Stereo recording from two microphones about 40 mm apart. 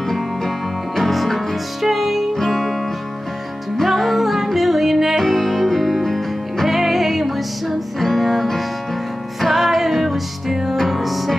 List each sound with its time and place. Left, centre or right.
0.9 s music: centre
2.3 s music: centre
3.7 s music: centre